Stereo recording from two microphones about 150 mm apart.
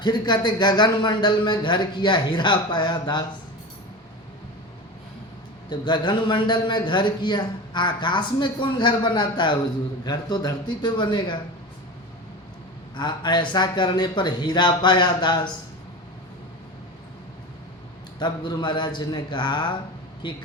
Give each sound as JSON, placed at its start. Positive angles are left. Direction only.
{"t": 0.0, "sound": "speech", "side_deg": 30}
{"t": 5.6, "sound": "a man's voice", "side_deg": 30}
{"t": 13.0, "sound": "speech", "side_deg": 30}
{"t": 18.2, "sound": "a man's voice", "side_deg": 30}